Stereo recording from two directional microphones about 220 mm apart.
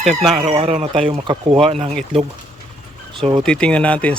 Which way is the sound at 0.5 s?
30° right (ahead or behind).